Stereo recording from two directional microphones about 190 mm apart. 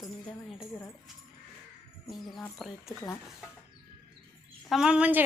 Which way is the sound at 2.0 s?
Centre (ahead or behind).